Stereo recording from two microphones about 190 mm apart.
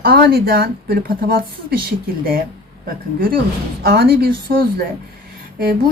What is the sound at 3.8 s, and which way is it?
Speech, 55° right (ahead or behind).